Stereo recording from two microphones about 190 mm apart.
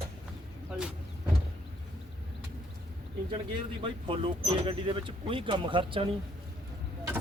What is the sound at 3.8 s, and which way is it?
Speech, 25° right (ahead or behind).